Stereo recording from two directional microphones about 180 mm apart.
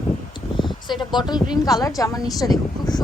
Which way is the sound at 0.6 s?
25° left (ahead or behind).